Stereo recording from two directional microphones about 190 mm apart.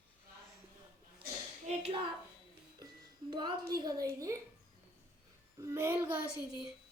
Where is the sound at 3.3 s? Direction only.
25° right (ahead or behind).